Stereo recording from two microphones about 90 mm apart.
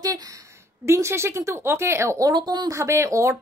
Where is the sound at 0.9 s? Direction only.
30° right (ahead or behind).